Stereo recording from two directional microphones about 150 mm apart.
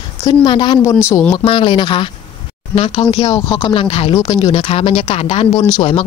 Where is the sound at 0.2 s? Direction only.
30° left (ahead or behind).